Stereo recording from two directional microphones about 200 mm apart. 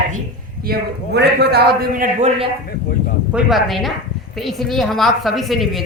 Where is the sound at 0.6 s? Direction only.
50° right (ahead or behind).